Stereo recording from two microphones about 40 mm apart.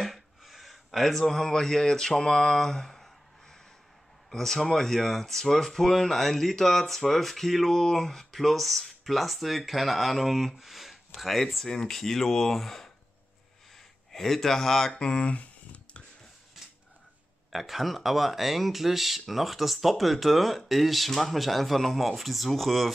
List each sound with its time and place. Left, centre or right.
0.0 s a sound: centre
4.3 s speech: centre
11.6 s speech: centre
14.1 s speech: centre
14.9 s a sound: left
17.5 s speech: centre